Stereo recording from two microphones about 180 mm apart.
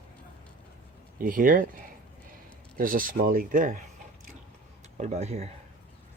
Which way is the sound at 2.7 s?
50° right (ahead or behind).